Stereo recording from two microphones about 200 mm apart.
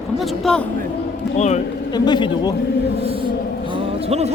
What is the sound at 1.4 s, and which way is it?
Bee, 35° left (ahead or behind).